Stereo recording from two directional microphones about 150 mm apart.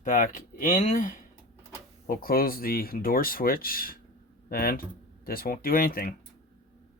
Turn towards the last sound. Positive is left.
turn(degrees=75)  # may be behind; listen again after turning